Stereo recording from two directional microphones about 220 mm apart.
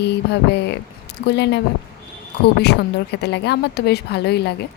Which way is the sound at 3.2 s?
50° left (ahead or behind).